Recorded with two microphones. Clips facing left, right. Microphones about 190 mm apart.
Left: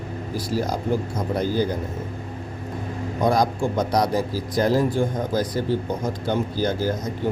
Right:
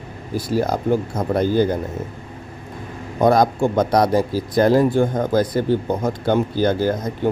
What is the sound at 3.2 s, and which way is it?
Speech, 60° right (ahead or behind).